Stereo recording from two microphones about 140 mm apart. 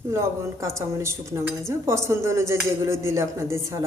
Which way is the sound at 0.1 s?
20° right (ahead or behind).